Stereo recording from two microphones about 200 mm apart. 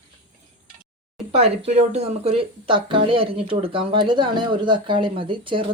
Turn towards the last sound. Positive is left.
turn(degrees=-25)  # may be behind; listen again after turning